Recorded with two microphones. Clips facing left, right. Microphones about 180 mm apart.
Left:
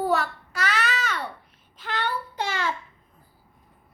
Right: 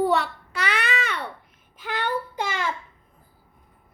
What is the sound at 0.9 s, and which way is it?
Babbling, 60° right (ahead or behind).